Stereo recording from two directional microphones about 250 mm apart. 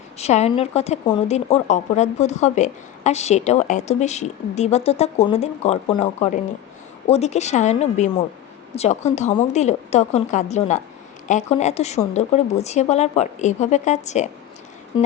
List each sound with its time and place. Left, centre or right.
0.2 s a woman's voice: left